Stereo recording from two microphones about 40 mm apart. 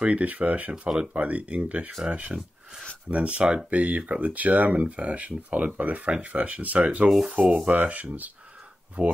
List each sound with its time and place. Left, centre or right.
0.0 s speech: right
0.8 s speech: centre
1.1 s speech: right
2.2 s speech: centre
3.1 s speech: right
7.2 s sanding: right
7.7 s speech: right